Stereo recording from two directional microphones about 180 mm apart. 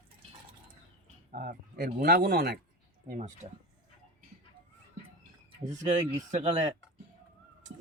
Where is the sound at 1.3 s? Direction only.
55° right (ahead or behind).